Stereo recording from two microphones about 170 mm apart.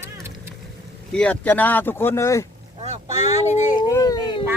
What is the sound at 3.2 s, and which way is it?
Speech, 45° left (ahead or behind).